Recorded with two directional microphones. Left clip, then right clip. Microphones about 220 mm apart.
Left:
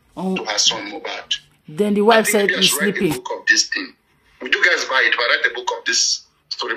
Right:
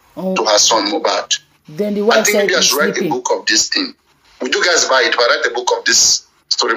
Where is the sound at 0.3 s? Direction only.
25° right (ahead or behind).